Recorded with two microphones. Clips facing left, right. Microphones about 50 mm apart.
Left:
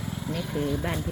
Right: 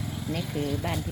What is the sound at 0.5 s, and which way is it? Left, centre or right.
Speech, centre.